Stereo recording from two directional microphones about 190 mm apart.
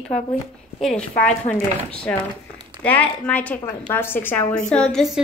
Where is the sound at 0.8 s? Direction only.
5° left (ahead or behind).